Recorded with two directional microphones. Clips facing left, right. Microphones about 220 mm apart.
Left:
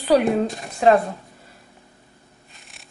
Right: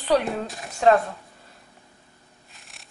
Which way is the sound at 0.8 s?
15° left (ahead or behind).